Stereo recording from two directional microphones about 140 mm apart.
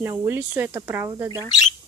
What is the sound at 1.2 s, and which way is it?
Speech, 25° right (ahead or behind).